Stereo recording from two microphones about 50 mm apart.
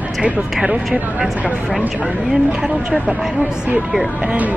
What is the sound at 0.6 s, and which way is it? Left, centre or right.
A woman's voice, centre.